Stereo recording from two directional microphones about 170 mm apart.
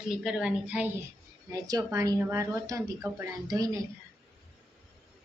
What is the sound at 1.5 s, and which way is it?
Speech, 20° right (ahead or behind).